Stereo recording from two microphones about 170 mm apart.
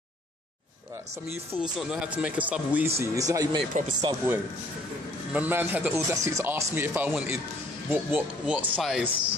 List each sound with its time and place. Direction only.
1.6 s speech: 5° right (ahead or behind)
3.0 s speech: 20° right (ahead or behind)
6.1 s speech: 20° right (ahead or behind)